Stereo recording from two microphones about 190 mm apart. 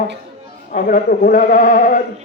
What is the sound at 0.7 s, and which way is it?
Mantra, 45° left (ahead or behind).